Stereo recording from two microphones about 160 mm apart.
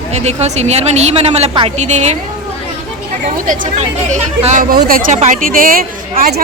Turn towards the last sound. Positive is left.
turn(degrees=-65)  # may be behind; listen again after turning